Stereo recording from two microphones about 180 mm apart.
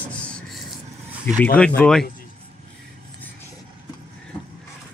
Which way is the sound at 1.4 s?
10° left (ahead or behind).